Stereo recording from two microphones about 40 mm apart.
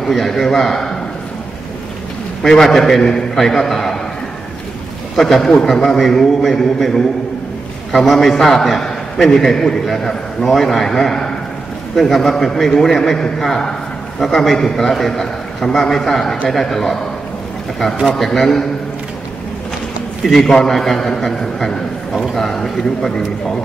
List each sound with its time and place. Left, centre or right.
0.1 s a man's voice: centre
2.4 s a man's voice: centre
5.1 s a man's voice: centre
18.2 s a man's voice: centre
20.2 s a man's voice: centre